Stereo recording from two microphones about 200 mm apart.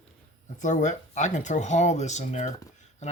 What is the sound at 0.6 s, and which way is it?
Speech, 35° left (ahead or behind).